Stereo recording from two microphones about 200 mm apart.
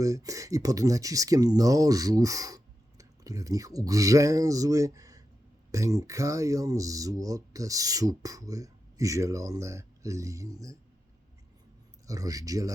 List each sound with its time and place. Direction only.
0.0 s speech: 15° right (ahead or behind)
12.0 s speech: 15° right (ahead or behind)